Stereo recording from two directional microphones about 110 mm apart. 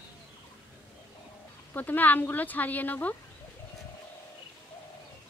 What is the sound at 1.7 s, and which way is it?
Speech, 15° left (ahead or behind).